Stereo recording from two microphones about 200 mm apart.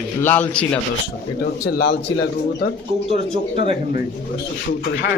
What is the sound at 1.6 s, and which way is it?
Speech, 55° left (ahead or behind).